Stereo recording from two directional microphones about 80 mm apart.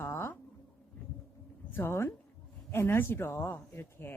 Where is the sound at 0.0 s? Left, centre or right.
Left.